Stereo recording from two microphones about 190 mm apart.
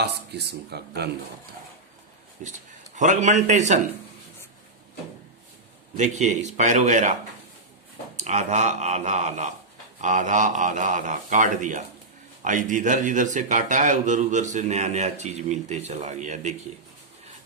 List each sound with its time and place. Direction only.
0.0 s speech: 60° right (ahead or behind)
2.4 s speech: 40° right (ahead or behind)
6.0 s speech: 35° right (ahead or behind)